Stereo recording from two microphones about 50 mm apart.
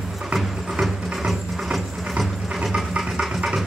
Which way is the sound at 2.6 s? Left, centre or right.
Centre.